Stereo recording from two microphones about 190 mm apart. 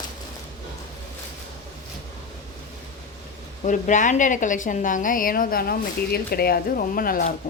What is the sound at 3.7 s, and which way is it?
A woman's voice, 40° left (ahead or behind).